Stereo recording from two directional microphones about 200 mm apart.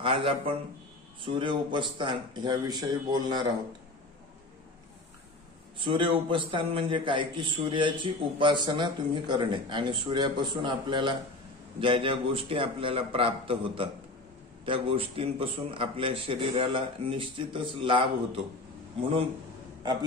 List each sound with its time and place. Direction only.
0.0 s a man's voice: 25° right (ahead or behind)
5.8 s a man's voice: 25° right (ahead or behind)